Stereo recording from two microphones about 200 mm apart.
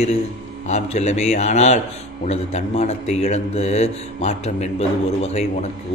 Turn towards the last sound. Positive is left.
turn(degrees=30)  # may be behind; listen again after turning